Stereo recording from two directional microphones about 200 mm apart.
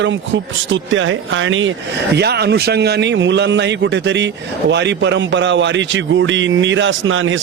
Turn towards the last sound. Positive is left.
turn(degrees=-75)  # may be behind; listen again after turning